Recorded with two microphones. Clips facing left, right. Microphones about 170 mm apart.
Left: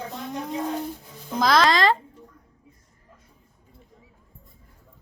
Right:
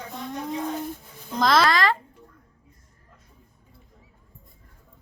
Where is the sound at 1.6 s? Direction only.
25° left (ahead or behind).